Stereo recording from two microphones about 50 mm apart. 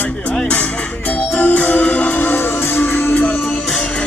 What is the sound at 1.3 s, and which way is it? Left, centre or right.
Music, left.